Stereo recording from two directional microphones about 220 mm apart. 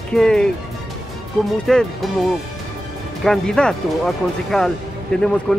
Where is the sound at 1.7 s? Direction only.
Centre (ahead or behind).